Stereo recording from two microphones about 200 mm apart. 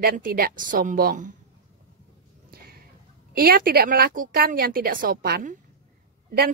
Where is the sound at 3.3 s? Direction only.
50° right (ahead or behind).